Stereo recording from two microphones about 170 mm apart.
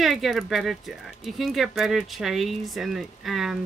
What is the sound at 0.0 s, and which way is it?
Speech, centre (ahead or behind).